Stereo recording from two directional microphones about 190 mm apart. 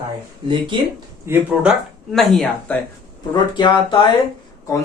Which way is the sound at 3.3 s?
25° left (ahead or behind).